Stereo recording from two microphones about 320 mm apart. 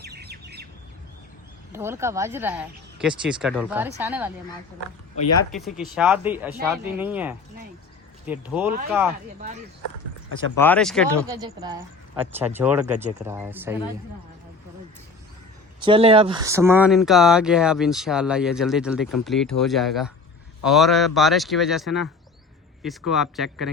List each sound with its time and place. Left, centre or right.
0.0 s squawk: right
1.7 s speech: centre
5.5 s speech: centre
10.6 s speech: centre
11.3 s speech: centre
15.8 s speech: centre